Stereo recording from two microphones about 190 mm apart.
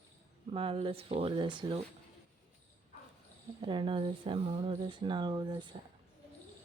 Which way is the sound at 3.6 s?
25° right (ahead or behind).